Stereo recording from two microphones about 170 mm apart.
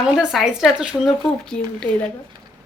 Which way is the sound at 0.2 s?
Centre (ahead or behind).